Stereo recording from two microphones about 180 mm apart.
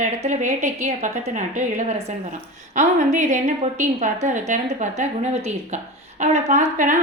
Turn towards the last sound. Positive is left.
turn(degrees=-45)  # may be behind; listen again after turning